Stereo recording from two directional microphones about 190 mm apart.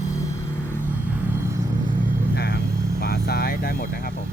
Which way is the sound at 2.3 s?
60° left (ahead or behind).